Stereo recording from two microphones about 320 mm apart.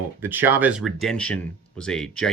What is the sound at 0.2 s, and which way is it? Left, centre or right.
Speech, centre.